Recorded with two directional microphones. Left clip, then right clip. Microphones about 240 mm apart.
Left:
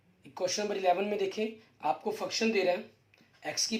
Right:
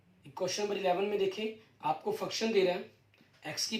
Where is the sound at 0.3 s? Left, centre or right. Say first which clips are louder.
Left 2 dB; left.